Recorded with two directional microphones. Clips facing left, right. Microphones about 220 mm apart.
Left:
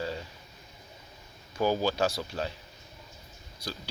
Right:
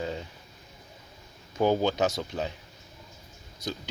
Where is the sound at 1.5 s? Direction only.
20° right (ahead or behind).